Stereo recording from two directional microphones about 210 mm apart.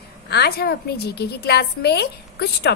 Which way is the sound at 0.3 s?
50° left (ahead or behind).